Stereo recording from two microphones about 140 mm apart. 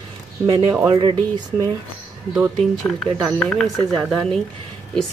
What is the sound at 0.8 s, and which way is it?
Speech, 35° right (ahead or behind).